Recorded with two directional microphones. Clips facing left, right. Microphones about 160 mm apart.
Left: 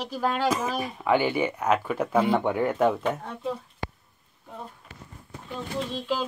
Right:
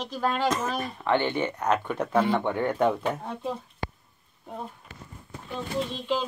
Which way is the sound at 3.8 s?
90° left.